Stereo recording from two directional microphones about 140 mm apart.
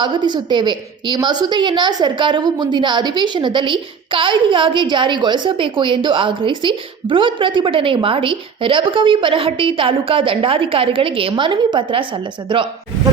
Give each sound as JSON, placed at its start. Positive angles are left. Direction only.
{"t": 0.0, "sound": "a woman's voice", "side_deg": -30}